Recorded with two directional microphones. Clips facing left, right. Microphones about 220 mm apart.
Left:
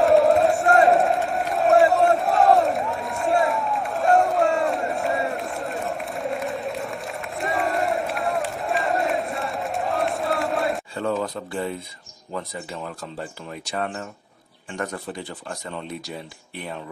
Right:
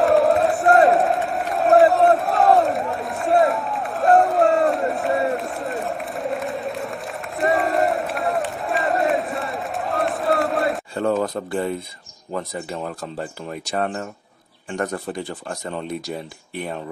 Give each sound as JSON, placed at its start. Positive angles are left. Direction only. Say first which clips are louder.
{"t": 0.0, "sound": "crowd", "louder": "even", "side_deg": 0}
{"t": 11.0, "sound": "a sound", "louder": "right 6 dB", "side_deg": -45}
{"t": 12.3, "sound": "a man's voice", "louder": "right 4 dB", "side_deg": -45}